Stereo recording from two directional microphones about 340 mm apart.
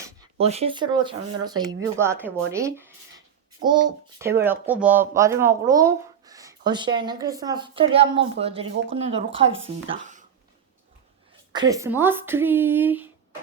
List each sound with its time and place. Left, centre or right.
0.0 s a child's voice: centre
9.9 s a sound: right
11.5 s a child's voice: centre